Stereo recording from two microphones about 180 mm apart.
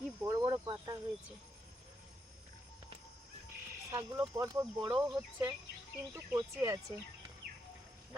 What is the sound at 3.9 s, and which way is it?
Speech, 15° right (ahead or behind).